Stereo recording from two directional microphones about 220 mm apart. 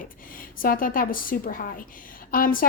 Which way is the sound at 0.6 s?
40° left (ahead or behind).